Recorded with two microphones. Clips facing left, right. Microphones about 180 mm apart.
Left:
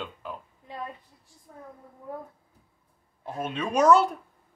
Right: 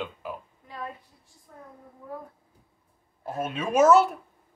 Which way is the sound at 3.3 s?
5° right (ahead or behind).